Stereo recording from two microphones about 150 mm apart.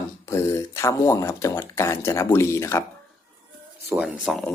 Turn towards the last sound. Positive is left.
turn(degrees=0)  # may be behind; listen again after turning